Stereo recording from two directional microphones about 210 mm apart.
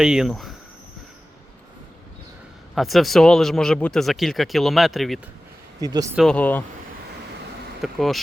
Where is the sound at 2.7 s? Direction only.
Centre (ahead or behind).